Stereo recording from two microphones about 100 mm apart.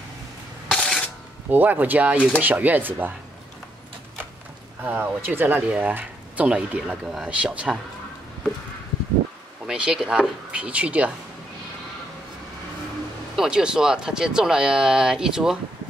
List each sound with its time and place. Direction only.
0.7 s camera: 10° left (ahead or behind)
1.5 s speech: 20° right (ahead or behind)
4.8 s speech: 20° right (ahead or behind)
9.7 s speech: 10° right (ahead or behind)
13.4 s speech: 10° right (ahead or behind)